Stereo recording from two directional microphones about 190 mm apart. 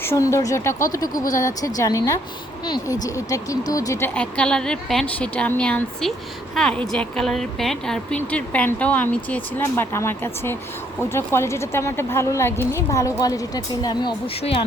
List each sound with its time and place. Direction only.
0.0 s speech: 15° left (ahead or behind)
4.1 s a woman's voice: 5° left (ahead or behind); by 14.6 s 25° left (ahead or behind)